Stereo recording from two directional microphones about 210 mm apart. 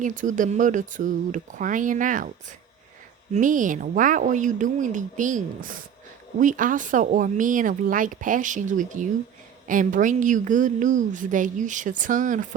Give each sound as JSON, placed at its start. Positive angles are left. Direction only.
{"t": 0.0, "sound": "a woman's voice", "side_deg": -35}
{"t": 3.3, "sound": "a woman's voice", "side_deg": -40}